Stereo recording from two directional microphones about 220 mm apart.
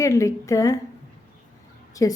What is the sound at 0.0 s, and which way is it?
Speech, 15° left (ahead or behind).